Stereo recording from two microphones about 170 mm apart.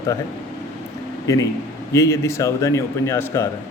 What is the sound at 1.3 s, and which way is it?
A man's voice, 20° left (ahead or behind).